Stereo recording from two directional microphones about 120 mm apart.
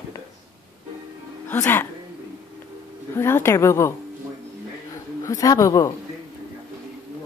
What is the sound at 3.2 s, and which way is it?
Speech, 20° left (ahead or behind).